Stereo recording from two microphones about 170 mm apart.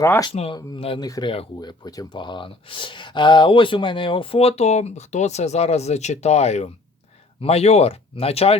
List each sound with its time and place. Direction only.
0.0 s speech: 15° left (ahead or behind)
0.3 s speech: 30° left (ahead or behind)